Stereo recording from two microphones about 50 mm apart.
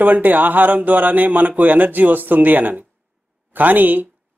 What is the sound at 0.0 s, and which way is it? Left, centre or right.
Speech, right.